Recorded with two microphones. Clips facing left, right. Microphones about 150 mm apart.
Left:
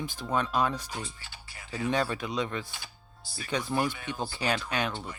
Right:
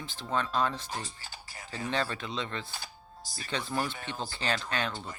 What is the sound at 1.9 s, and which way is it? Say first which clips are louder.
Speech: left 4 dB; 15° left (ahead or behind).